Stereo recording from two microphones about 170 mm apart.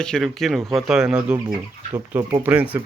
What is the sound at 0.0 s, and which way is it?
Speech, 5° left (ahead or behind).